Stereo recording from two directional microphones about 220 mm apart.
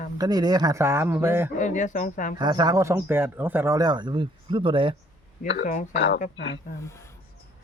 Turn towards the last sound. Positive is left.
turn(degrees=10)  # may be behind; listen again after turning